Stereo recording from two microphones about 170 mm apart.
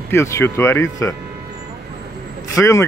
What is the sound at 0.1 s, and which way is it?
Speech, 15° left (ahead or behind).